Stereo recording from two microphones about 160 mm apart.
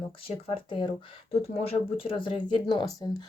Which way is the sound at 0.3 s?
30° left (ahead or behind).